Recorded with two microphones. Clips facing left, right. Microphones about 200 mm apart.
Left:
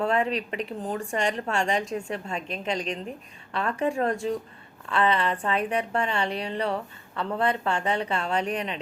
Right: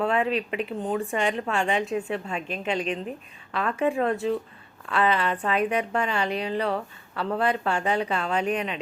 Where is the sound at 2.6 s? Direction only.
35° left (ahead or behind).